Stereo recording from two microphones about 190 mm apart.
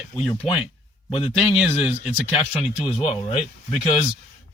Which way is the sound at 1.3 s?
5° right (ahead or behind).